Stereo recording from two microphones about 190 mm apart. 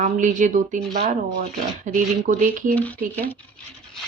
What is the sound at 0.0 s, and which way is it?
A woman's voice, 40° right (ahead or behind).